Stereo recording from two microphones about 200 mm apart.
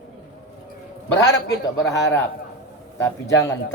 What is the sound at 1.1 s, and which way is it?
A man's voice, 15° left (ahead or behind).